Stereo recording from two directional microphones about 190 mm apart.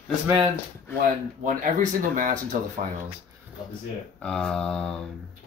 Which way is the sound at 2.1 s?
45° right (ahead or behind).